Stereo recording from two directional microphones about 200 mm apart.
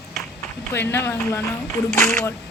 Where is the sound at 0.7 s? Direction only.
10° left (ahead or behind).